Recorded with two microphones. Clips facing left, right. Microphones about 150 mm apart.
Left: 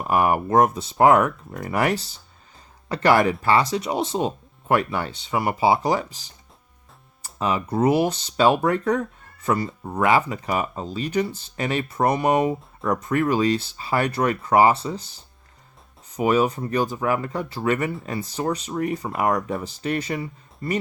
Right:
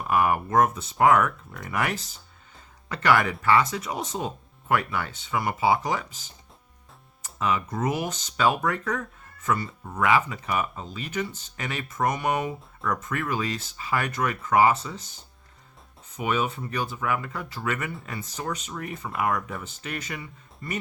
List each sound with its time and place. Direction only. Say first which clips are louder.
0.0 s speech: left 3 dB; 30° left (ahead or behind)
16.1 s speech: left 7 dB; 35° left (ahead or behind)